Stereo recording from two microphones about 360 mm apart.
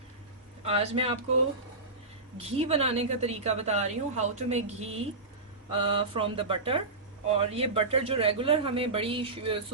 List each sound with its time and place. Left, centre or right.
0.6 s a woman's voice: centre
2.4 s a woman's voice: centre